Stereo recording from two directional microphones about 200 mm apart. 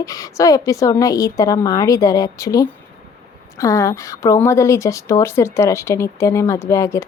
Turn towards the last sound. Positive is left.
turn(degrees=15)  # may be behind; listen again after turning